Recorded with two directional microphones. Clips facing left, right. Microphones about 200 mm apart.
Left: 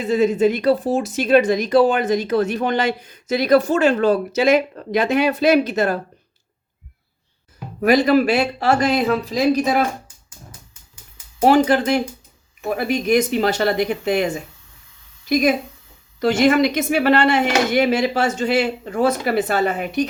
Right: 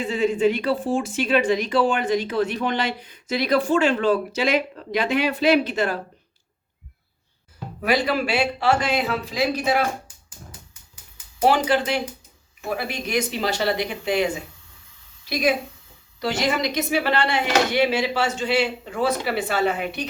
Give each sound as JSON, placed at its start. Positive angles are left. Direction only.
{"t": 0.0, "sound": "speech", "side_deg": 40}
{"t": 7.8, "sound": "speech", "side_deg": 45}
{"t": 11.4, "sound": "speech", "side_deg": 45}
{"t": 15.3, "sound": "speech", "side_deg": 45}